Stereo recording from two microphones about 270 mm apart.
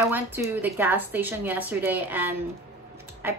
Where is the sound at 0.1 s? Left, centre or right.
Centre.